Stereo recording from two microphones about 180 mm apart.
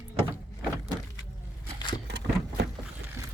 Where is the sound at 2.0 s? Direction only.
70° right (ahead or behind).